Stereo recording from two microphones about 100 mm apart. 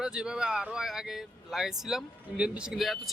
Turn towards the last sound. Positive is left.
turn(degrees=0)  # may be behind; listen again after turning